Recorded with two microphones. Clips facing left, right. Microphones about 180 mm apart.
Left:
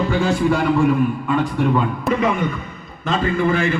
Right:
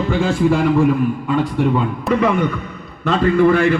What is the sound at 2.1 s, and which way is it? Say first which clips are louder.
A man's voice: right 5 dB; 65° right (ahead or behind).